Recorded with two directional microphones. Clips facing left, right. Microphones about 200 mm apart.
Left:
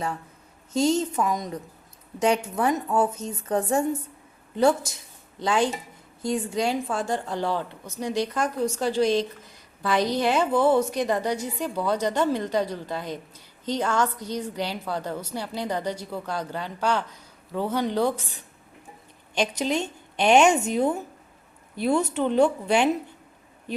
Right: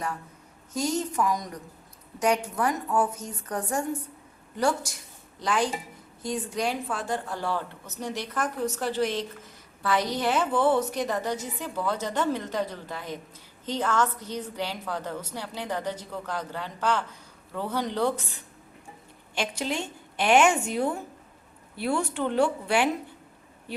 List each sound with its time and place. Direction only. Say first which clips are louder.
0.7 s a woman's voice: left 6 dB; 25° left (ahead or behind)
7.4 s a woman's voice: left 3 dB; 15° left (ahead or behind)
19.6 s a woman's voice: left 5 dB; 20° left (ahead or behind)